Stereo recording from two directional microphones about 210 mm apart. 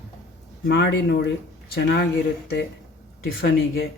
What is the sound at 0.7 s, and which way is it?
Speech, 55° left (ahead or behind).